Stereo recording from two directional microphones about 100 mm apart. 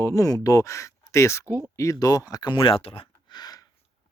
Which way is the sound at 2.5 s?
60° left (ahead or behind).